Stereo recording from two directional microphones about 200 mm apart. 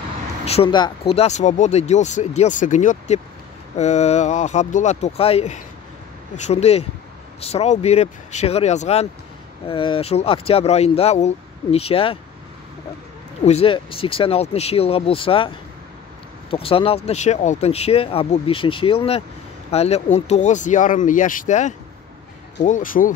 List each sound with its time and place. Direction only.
0.5 s speech: 25° left (ahead or behind)
13.4 s speech: 30° left (ahead or behind)